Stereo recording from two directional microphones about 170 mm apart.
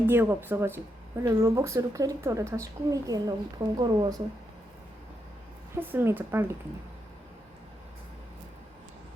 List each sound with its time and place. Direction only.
0.1 s speech: 15° right (ahead or behind)
5.7 s speech: 15° right (ahead or behind)